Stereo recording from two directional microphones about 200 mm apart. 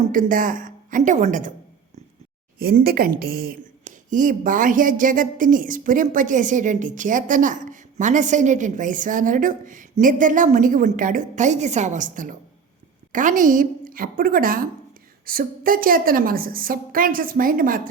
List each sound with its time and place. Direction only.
0.1 s a woman's voice: 45° right (ahead or behind)
2.6 s a woman's voice: 50° right (ahead or behind)